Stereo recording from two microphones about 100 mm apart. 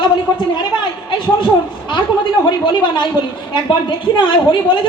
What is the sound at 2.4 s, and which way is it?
Speech, 55° left (ahead or behind).